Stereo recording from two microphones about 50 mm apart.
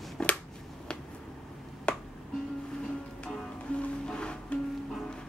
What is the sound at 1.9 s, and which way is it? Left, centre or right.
Music, left.